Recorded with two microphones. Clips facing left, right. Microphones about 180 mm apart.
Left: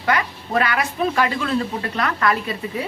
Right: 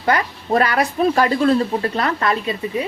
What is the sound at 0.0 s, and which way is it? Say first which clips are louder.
Speech: right 2 dB; 35° right (ahead or behind).